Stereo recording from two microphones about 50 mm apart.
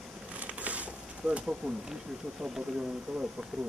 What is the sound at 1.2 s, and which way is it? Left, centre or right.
Speech, centre.